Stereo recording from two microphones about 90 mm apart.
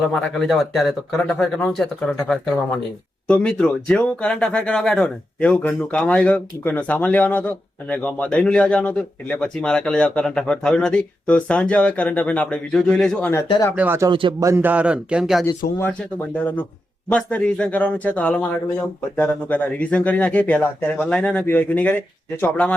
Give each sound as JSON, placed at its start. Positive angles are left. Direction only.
{"t": 0.1, "sound": "speech", "side_deg": 10}
{"t": 0.4, "sound": "speech", "side_deg": 0}
{"t": 1.2, "sound": "speech", "side_deg": 10}
{"t": 13.7, "sound": "speech", "side_deg": -20}
{"t": 14.1, "sound": "speech", "side_deg": -65}
{"t": 14.3, "sound": "a man's voice", "side_deg": -35}
{"t": 14.6, "sound": "speech", "side_deg": -15}
{"t": 15.8, "sound": "speech", "side_deg": 15}